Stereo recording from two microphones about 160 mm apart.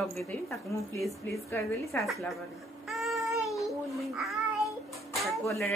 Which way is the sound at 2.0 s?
Centre (ahead or behind).